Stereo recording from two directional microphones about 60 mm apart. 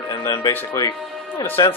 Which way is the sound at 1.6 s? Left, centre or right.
Left.